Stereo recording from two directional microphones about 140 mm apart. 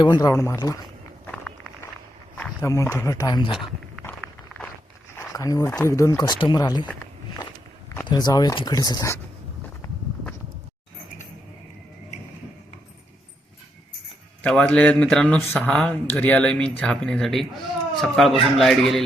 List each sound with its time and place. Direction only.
0.0 s speech: 25° left (ahead or behind)
2.6 s speech: 20° left (ahead or behind)
4.0 s walk: 10° left (ahead or behind)
5.1 s speech: 25° left (ahead or behind)
8.0 s speech: 30° left (ahead or behind)
14.4 s speech: 10° left (ahead or behind)